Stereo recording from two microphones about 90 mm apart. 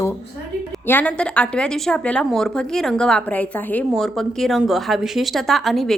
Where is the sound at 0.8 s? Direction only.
20° left (ahead or behind).